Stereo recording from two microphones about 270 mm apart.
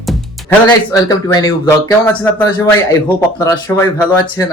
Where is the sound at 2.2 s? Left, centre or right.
Centre.